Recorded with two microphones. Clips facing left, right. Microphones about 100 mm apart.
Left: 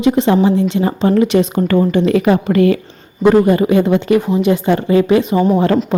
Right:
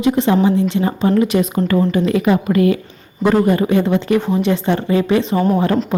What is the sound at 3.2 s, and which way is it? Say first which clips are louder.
A woman's voice: left 4 dB; 20° left (ahead or behind).